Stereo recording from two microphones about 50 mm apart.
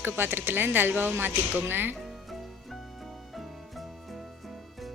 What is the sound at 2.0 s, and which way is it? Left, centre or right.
Music, centre.